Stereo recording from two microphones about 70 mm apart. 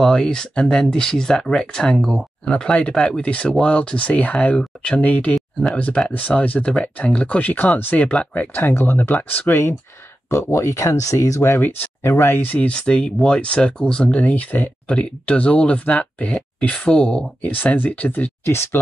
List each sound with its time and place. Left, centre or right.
0.0 s speech: centre
5.3 s a sound: centre
5.8 s speech: centre
9.5 s speech: left
12.0 s speech: left
12.4 s speech: centre
17.5 s speech: left
18.4 s speech: left